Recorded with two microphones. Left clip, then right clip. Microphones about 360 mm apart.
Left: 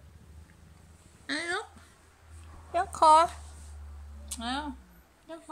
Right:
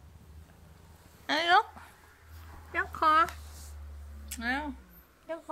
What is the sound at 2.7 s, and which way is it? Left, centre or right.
Speech, centre.